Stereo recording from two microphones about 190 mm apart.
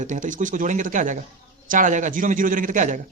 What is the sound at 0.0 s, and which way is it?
Speech, 40° right (ahead or behind).